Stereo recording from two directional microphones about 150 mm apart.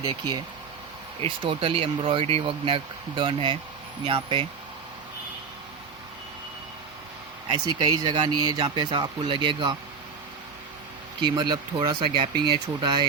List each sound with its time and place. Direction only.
0.0 s speech: 25° right (ahead or behind)
1.2 s speech: 40° right (ahead or behind)
7.8 s speech: 30° right (ahead or behind)
11.2 s speech: 30° right (ahead or behind)